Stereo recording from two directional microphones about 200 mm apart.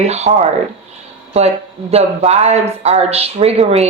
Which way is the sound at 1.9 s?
30° right (ahead or behind).